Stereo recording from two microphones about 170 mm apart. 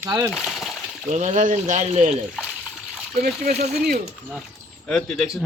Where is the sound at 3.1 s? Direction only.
55° right (ahead or behind).